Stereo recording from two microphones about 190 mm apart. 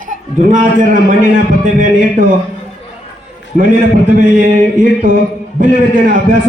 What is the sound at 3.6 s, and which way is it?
A man's voice, 45° right (ahead or behind).